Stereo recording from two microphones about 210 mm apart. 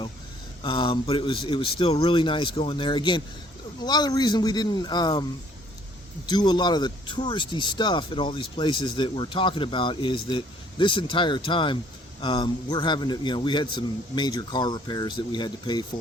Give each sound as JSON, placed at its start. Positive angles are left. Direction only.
{"t": 0.6, "sound": "speech", "side_deg": 25}
{"t": 6.2, "sound": "speech", "side_deg": 20}